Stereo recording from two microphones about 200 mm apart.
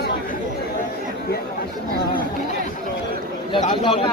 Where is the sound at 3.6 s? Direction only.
20° left (ahead or behind).